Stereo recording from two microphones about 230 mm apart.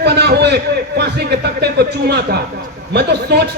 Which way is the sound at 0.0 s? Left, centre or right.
Right.